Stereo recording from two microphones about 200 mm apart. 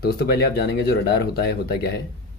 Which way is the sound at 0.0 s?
50° left (ahead or behind).